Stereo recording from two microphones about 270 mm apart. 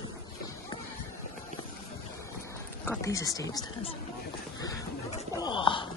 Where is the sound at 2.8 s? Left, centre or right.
Centre.